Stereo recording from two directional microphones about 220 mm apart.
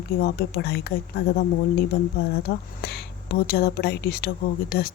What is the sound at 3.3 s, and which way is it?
Speech, 45° left (ahead or behind).